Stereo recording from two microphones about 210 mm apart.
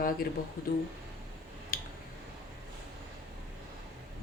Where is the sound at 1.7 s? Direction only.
45° left (ahead or behind).